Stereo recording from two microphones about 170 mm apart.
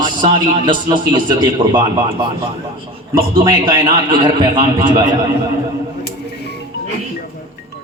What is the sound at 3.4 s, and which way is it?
A man's voice, 25° right (ahead or behind).